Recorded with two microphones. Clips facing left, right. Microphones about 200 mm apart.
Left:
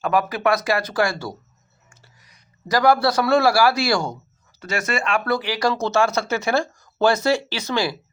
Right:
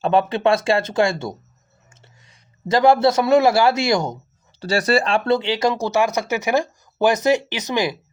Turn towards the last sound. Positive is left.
turn(degrees=-20)  # may be behind; listen again after turning